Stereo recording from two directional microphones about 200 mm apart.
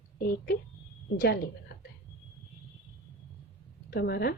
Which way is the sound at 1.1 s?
55° left (ahead or behind).